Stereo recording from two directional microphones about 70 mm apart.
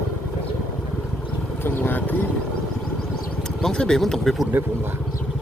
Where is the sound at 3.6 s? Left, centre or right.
Centre.